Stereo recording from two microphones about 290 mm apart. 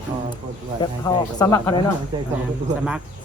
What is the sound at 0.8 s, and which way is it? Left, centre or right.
Speech, centre.